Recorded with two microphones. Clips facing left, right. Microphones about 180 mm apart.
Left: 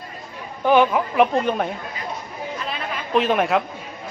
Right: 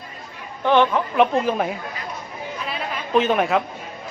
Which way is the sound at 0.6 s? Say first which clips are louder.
Left 1 dB; 10° left (ahead or behind).